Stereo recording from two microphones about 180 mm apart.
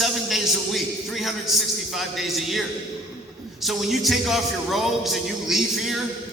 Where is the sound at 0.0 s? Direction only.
Centre (ahead or behind).